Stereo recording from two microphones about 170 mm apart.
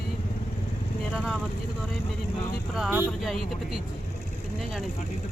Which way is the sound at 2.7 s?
Centre (ahead or behind).